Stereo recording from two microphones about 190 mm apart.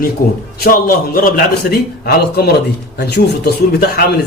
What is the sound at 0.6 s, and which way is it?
A man's voice, 50° left (ahead or behind).